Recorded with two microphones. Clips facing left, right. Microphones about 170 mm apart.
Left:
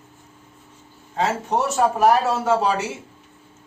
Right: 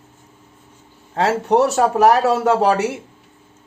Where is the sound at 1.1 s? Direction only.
65° right (ahead or behind).